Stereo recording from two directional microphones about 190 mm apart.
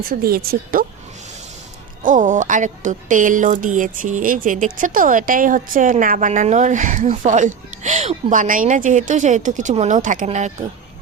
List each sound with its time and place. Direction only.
0.1 s speech: 50° right (ahead or behind)
2.0 s speech: 40° right (ahead or behind)